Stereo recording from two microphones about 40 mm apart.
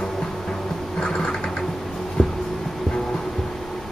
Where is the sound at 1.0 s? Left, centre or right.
Centre.